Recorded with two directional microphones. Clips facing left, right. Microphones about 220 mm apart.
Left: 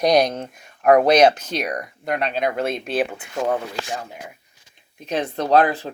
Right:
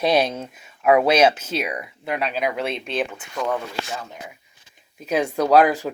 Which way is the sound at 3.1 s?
35° left (ahead or behind).